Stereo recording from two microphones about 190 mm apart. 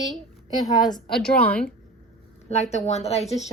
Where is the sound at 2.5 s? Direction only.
35° left (ahead or behind).